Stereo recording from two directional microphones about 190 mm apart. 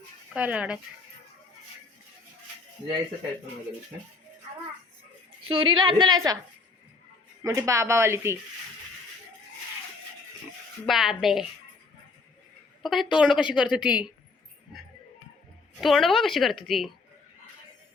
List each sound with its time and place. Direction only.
0.3 s speech: 5° right (ahead or behind)
5.5 s a woman's voice: 25° right (ahead or behind)
7.4 s speech: 15° right (ahead or behind)
10.8 s a woman's voice: centre (ahead or behind)
12.8 s a woman's voice: centre (ahead or behind)
15.8 s a woman's voice: centre (ahead or behind)